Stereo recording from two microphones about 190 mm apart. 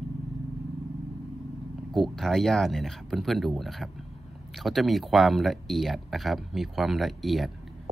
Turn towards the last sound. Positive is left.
turn(degrees=0)  # may be behind; listen again after turning